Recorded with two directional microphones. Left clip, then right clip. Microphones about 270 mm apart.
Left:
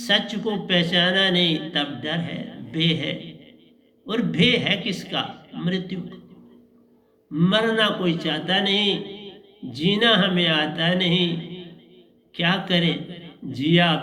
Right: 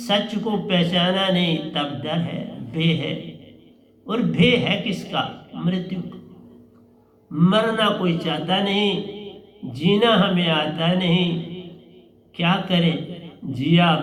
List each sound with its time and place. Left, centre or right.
0.0 s a man's voice: left
7.3 s a man's voice: left